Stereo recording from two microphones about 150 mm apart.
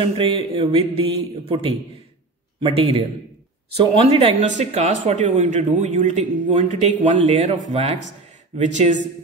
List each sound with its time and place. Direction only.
0.0 s speech: 35° right (ahead or behind); by 8.9 s 55° right (ahead or behind)